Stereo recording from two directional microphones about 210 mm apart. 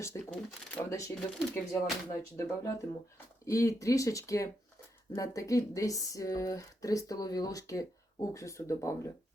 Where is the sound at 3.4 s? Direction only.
15° left (ahead or behind).